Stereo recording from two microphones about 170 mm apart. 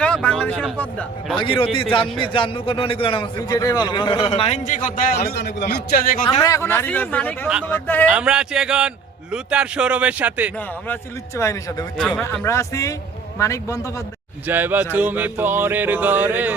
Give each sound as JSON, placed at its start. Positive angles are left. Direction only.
{"t": 0.0, "sound": "a sound", "side_deg": 5}
{"t": 0.8, "sound": "speech", "side_deg": 5}
{"t": 1.4, "sound": "a man's voice", "side_deg": 30}
{"t": 4.3, "sound": "a man's voice", "side_deg": 40}
{"t": 6.4, "sound": "speech", "side_deg": 15}
{"t": 8.1, "sound": "speech", "side_deg": -5}
{"t": 9.3, "sound": "music", "side_deg": -5}
{"t": 11.3, "sound": "speech", "side_deg": 15}
{"t": 11.9, "sound": "a man's voice", "side_deg": 5}
{"t": 14.4, "sound": "music", "side_deg": -10}